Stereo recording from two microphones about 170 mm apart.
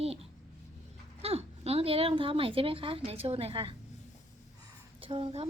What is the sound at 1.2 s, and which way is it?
A woman's voice, 35° right (ahead or behind).